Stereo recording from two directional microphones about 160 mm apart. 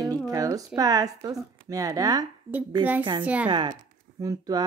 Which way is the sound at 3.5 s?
30° right (ahead or behind).